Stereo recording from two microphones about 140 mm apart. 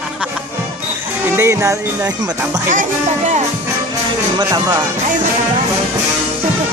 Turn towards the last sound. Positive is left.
turn(degrees=-30)  # may be behind; listen again after turning